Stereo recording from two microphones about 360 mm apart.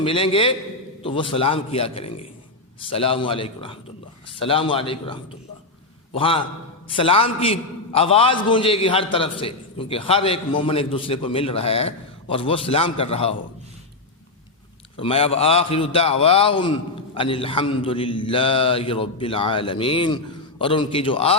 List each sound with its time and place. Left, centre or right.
0.0 s a man's voice: centre
6.1 s a man's voice: centre
14.9 s a man's voice: centre